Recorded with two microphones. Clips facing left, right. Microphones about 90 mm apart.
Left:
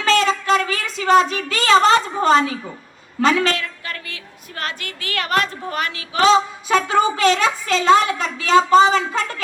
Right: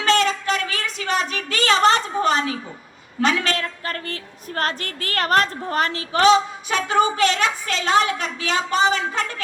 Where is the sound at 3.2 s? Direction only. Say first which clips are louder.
Left 4 dB; 35° left (ahead or behind).